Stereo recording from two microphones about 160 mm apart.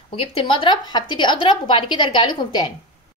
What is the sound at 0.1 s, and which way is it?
A woman's voice, 35° left (ahead or behind).